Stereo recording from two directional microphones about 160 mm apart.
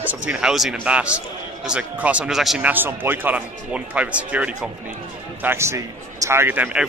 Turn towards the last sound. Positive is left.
turn(degrees=-10)  # may be behind; listen again after turning